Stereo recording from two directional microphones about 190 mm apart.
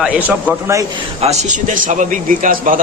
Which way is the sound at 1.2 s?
35° right (ahead or behind).